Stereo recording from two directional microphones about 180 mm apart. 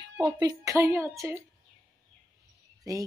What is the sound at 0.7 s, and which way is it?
Speech, 15° right (ahead or behind).